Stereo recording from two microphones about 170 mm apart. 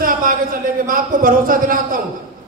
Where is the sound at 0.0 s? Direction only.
55° right (ahead or behind).